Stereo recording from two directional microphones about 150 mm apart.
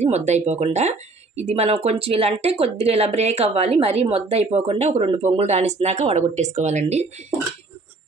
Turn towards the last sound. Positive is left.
turn(degrees=-45)  # may be behind; listen again after turning